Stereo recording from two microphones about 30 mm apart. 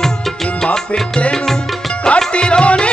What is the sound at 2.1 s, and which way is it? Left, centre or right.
Music, left.